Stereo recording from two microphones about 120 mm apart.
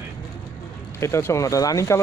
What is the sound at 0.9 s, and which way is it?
Speech, 25° left (ahead or behind).